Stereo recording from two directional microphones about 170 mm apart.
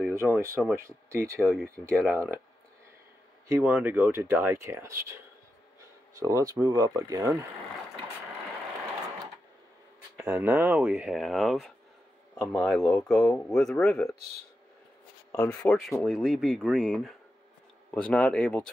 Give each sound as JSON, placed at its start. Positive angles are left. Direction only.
{"t": 0.0, "sound": "speech", "side_deg": -15}
{"t": 3.4, "sound": "speech", "side_deg": -15}
{"t": 6.1, "sound": "speech", "side_deg": -20}
{"t": 10.1, "sound": "speech", "side_deg": -15}
{"t": 15.3, "sound": "speech", "side_deg": 10}